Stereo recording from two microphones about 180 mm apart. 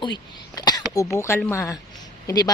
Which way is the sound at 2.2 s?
20° left (ahead or behind).